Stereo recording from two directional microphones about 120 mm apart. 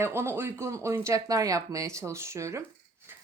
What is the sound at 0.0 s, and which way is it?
Speech, 20° right (ahead or behind).